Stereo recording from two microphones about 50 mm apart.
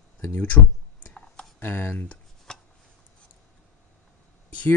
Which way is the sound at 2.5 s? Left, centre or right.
Centre.